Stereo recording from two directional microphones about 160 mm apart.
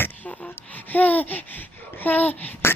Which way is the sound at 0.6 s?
10° left (ahead or behind).